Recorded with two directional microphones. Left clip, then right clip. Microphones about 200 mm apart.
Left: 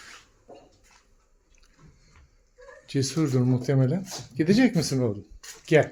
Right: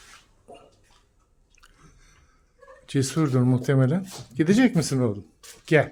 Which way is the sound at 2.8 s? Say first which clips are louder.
Right 2 dB; 20° right (ahead or behind).